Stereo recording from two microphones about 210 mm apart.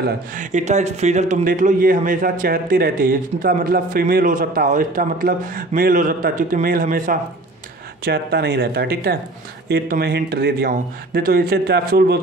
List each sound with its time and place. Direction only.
0.0 s a man's voice: 35° right (ahead or behind)